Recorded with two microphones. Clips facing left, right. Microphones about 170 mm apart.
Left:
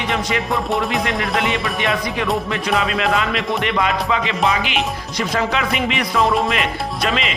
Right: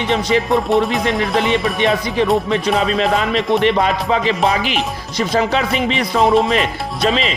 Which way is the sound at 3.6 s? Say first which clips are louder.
Right 4 dB; 35° right (ahead or behind).